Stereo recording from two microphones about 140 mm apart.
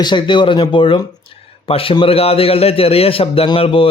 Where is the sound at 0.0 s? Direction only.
35° left (ahead or behind).